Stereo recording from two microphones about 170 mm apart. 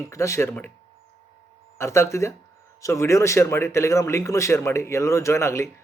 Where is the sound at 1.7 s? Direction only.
15° left (ahead or behind).